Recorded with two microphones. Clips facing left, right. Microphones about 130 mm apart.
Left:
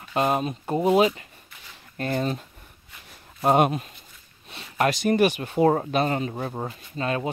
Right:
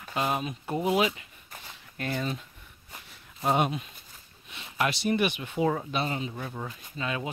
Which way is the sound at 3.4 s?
50° left (ahead or behind).